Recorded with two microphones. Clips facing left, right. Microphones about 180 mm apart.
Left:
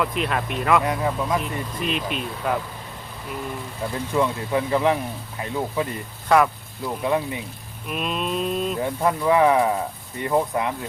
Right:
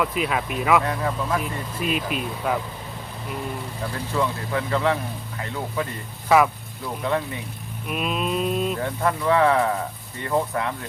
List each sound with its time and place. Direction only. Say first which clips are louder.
0.0 s speech: even; 5° right (ahead or behind)
0.8 s speech: left 2 dB; 15° left (ahead or behind)
1.4 s speech: left 1 dB; 5° right (ahead or behind)
4.1 s speech: left 3 dB; 15° left (ahead or behind)
6.2 s speech: even; centre (ahead or behind)
7.9 s raindrop: right 1 dB; 5° right (ahead or behind)
8.8 s speech: left 2 dB; 15° left (ahead or behind)